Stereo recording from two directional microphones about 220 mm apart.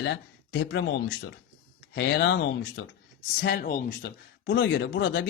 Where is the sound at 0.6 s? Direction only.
55° left (ahead or behind).